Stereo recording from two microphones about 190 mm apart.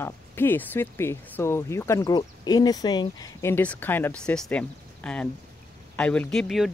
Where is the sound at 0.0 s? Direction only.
10° left (ahead or behind).